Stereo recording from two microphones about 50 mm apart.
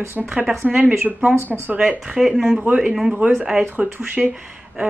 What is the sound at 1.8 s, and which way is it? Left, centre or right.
Speech, centre.